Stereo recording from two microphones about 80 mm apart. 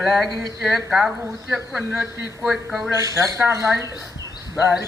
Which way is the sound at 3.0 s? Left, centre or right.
Right.